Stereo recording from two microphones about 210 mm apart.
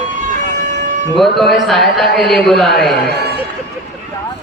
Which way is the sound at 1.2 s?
Centre (ahead or behind).